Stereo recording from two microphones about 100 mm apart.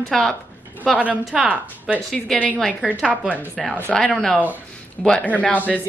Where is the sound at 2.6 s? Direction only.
5° left (ahead or behind).